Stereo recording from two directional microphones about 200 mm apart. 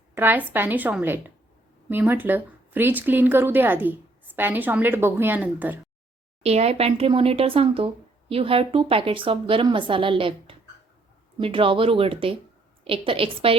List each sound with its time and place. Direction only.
0.1 s speech: 10° right (ahead or behind)
6.4 s speech: 30° right (ahead or behind)